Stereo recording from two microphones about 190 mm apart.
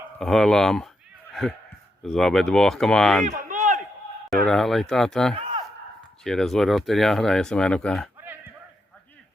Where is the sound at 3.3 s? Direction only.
40° right (ahead or behind).